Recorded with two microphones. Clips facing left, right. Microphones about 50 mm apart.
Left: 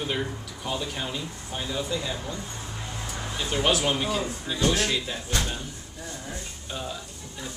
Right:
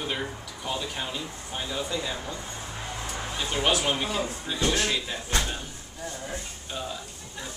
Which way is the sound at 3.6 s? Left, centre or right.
Centre.